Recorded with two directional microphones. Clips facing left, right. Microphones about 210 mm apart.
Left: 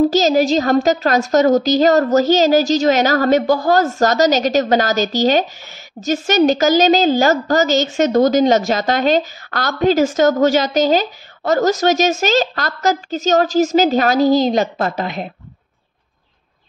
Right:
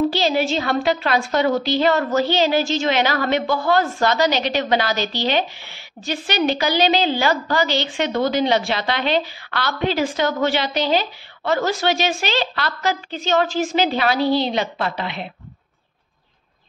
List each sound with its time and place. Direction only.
0.1 s a woman's voice: 40° left (ahead or behind)